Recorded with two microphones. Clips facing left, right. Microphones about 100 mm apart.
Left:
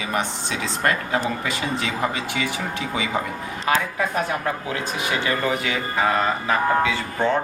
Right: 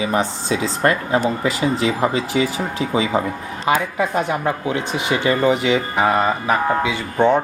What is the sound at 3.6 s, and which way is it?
Speech, 20° right (ahead or behind).